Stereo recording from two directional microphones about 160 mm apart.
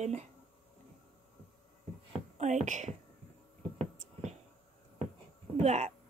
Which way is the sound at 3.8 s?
45° right (ahead or behind).